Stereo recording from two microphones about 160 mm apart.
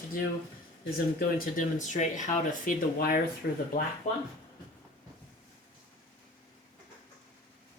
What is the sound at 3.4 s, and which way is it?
Speech, 85° left.